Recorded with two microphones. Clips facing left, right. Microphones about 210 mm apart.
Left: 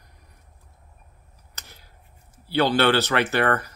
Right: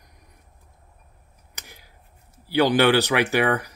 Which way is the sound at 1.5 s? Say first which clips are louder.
Right 2 dB; 15° right (ahead or behind).